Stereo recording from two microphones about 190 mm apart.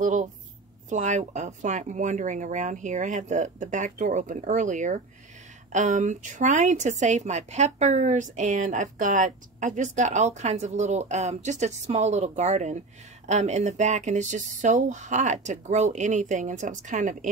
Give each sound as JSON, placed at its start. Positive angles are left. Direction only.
{"t": 0.0, "sound": "a woman's voice", "side_deg": -40}